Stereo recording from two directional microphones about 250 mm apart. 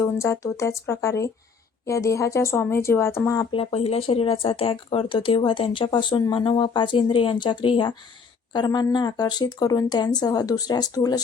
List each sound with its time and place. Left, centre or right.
0.0 s speech: centre